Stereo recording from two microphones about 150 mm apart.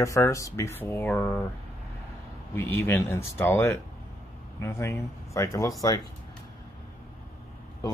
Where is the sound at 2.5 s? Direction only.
15° left (ahead or behind).